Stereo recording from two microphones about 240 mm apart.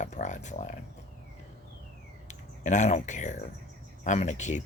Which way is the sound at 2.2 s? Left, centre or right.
Left.